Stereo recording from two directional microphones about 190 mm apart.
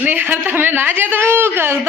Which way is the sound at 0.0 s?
10° right (ahead or behind).